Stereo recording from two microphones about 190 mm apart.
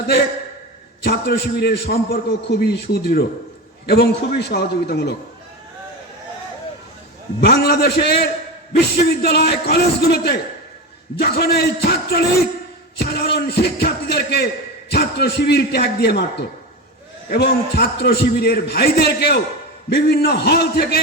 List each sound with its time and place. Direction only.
1.0 s a man's voice: 55° left (ahead or behind)
7.4 s a man's voice: 55° left (ahead or behind)